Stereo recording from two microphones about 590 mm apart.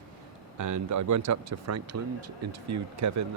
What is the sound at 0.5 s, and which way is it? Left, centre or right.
Speech, right.